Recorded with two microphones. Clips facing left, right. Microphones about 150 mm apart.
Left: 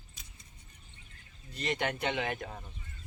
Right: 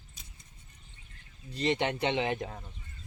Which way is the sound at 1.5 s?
30° right (ahead or behind).